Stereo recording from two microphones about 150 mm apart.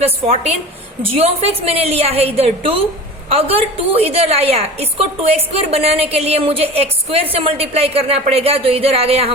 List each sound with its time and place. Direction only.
0.0 s a woman's voice: 45° right (ahead or behind)